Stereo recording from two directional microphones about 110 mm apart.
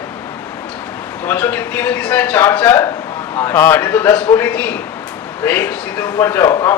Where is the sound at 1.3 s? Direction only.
15° left (ahead or behind).